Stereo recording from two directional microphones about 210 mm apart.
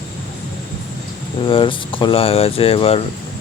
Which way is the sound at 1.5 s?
25° left (ahead or behind).